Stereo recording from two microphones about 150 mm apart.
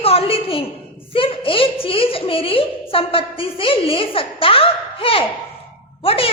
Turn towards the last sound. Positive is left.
turn(degrees=40)  # may be behind; listen again after turning